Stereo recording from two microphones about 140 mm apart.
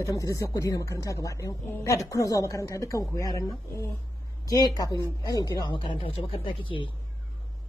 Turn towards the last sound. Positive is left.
turn(degrees=40)  # may be behind; listen again after turning